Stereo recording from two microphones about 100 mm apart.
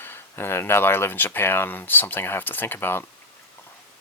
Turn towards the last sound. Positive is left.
turn(degrees=20)  # may be behind; listen again after turning